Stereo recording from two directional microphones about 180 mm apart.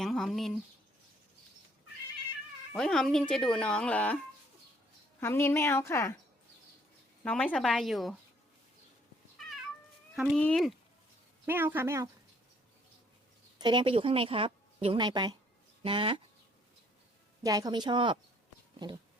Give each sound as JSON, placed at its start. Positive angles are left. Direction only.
{"t": 0.0, "sound": "speech", "side_deg": 0}
{"t": 2.7, "sound": "speech", "side_deg": 5}
{"t": 5.2, "sound": "a woman's voice", "side_deg": 15}
{"t": 7.3, "sound": "speech", "side_deg": 5}
{"t": 10.2, "sound": "speech", "side_deg": 5}
{"t": 11.4, "sound": "a woman's voice", "side_deg": -10}
{"t": 13.6, "sound": "speech", "side_deg": -25}
{"t": 17.4, "sound": "speech", "side_deg": -20}